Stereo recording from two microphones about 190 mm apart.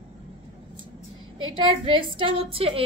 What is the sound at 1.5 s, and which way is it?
A woman's voice, 30° right (ahead or behind).